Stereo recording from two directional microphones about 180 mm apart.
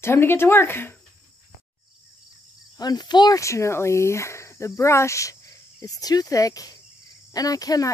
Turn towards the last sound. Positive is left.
turn(degrees=20)  # may be behind; listen again after turning